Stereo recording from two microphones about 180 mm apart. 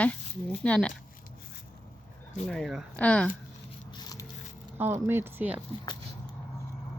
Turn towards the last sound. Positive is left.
turn(degrees=-10)  # may be behind; listen again after turning